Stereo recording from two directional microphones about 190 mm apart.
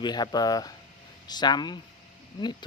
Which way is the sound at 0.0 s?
20° left (ahead or behind).